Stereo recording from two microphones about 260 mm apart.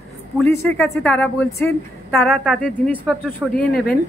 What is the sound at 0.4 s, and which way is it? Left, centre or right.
A woman's voice, centre.